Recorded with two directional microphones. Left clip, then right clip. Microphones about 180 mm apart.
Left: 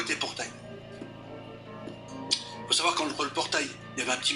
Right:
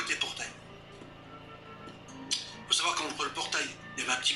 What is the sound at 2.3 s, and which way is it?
Speech, 30° left (ahead or behind).